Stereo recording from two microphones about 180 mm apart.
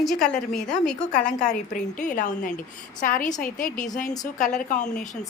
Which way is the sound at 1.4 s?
45° left (ahead or behind).